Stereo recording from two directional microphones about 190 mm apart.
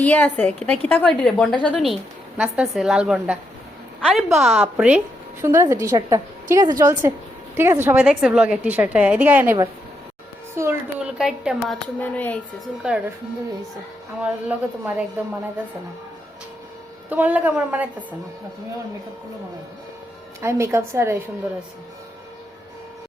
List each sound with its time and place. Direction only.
0.0 s a woman's voice: 10° left (ahead or behind); by 11.1 s 15° right (ahead or behind)
11.2 s a woman's voice: centre (ahead or behind)
14.2 s a woman's voice: 5° right (ahead or behind)
17.1 s a woman's voice: 10° right (ahead or behind)
20.4 s a woman's voice: 15° right (ahead or behind)